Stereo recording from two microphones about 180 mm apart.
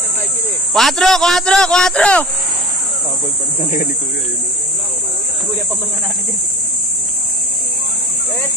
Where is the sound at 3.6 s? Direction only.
45° left (ahead or behind).